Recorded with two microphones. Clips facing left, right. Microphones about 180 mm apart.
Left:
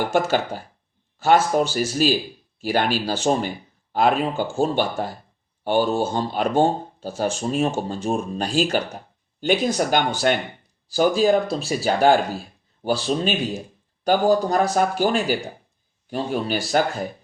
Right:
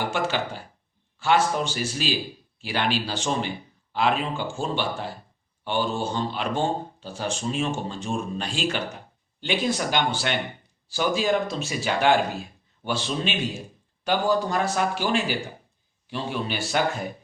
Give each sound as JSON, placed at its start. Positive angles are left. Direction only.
{"t": 0.1, "sound": "speech", "side_deg": 45}